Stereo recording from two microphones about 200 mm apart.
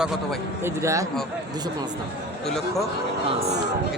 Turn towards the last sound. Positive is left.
turn(degrees=-30)  # may be behind; listen again after turning